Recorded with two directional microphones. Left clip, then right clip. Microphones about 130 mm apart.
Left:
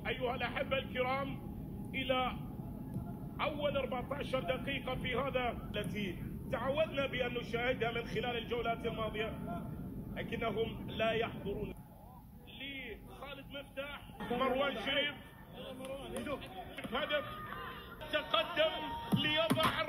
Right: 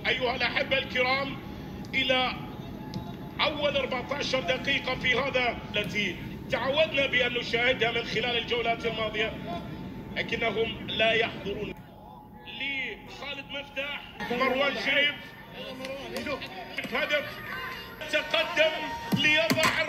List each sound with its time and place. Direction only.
0.0 s a man's voice: 25° right (ahead or behind)
3.3 s a man's voice: 25° right (ahead or behind)
12.5 s music: 15° right (ahead or behind)
13.7 s a man's voice: 15° right (ahead or behind)
16.2 s a man's voice: 15° right (ahead or behind)